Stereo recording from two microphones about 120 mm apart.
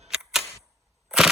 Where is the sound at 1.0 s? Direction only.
5° right (ahead or behind).